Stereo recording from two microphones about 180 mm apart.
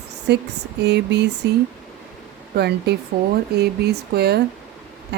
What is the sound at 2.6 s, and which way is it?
Speech, 65° right (ahead or behind).